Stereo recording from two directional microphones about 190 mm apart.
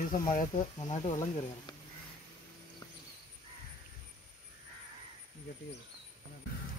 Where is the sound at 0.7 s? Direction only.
30° left (ahead or behind).